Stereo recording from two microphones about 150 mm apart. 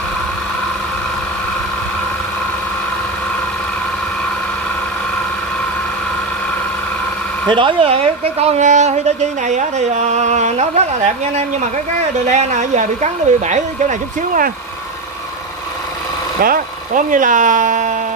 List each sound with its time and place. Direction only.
7.4 s a woman's voice: 35° right (ahead or behind); by 14.5 s 60° right (ahead or behind)
16.3 s speech: 75° right (ahead or behind); by 17.9 s 55° right (ahead or behind)